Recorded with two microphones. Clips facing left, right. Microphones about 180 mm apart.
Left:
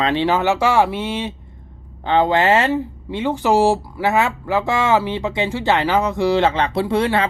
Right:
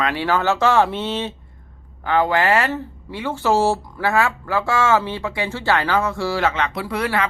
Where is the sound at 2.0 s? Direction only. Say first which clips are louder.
Left 2 dB; 25° left (ahead or behind).